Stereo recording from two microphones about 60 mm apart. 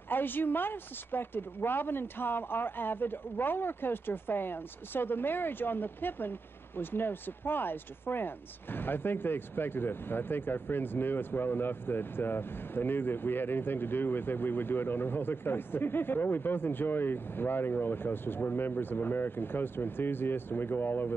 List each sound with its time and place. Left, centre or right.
0.1 s speech: left